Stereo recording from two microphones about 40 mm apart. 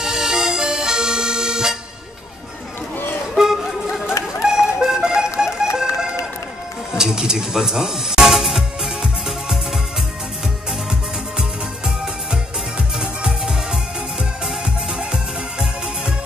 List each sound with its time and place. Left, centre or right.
0.0 s accordion: centre
3.4 s vehicle: centre
4.4 s music: centre
10.9 s music: centre